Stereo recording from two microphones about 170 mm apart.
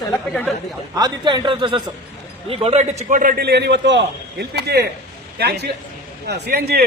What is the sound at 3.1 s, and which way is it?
A man's voice, 50° right (ahead or behind).